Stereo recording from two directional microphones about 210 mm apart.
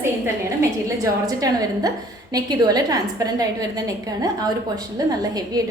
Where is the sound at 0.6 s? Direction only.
15° right (ahead or behind).